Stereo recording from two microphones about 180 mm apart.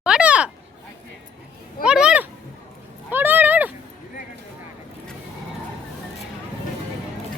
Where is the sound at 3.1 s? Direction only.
10° right (ahead or behind).